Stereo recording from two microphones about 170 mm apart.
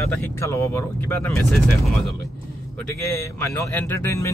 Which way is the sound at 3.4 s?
15° left (ahead or behind).